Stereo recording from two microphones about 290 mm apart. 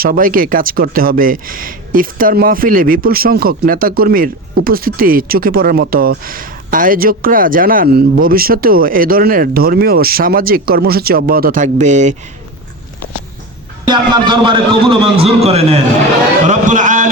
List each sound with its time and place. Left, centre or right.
0.0 s speech: right
13.8 s a man's voice: centre